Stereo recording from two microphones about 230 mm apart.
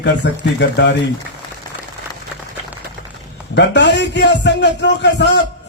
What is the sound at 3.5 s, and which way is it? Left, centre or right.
A man's voice, left.